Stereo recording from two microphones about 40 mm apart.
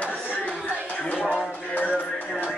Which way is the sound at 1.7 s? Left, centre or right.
Left.